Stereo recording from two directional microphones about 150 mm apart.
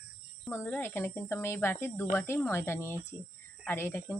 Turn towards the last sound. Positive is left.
turn(degrees=15)  # may be behind; listen again after turning